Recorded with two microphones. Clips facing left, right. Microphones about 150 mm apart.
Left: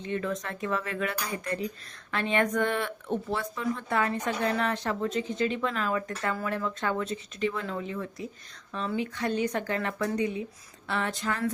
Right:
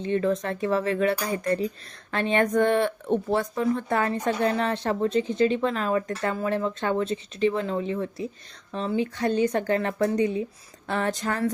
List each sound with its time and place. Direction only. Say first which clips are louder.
0.0 s speech: right 7 dB; 30° right (ahead or behind)